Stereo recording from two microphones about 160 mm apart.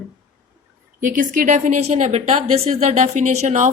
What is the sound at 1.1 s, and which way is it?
A woman's voice, 55° right (ahead or behind).